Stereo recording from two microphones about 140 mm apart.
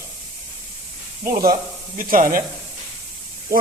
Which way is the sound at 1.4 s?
80° right.